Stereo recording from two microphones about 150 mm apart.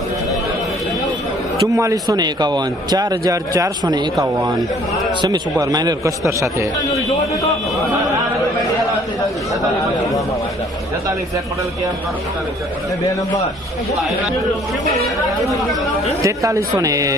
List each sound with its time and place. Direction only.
1.6 s a man's voice: 20° right (ahead or behind)
16.2 s a man's voice: 20° right (ahead or behind)